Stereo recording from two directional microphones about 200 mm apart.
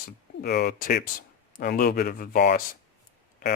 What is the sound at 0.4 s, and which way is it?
Speech, 50° left (ahead or behind).